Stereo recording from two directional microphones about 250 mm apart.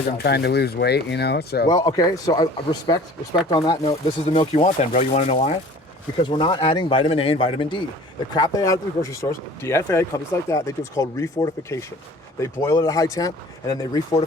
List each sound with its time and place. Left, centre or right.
0.2 s speech: left
1.7 s a man's voice: centre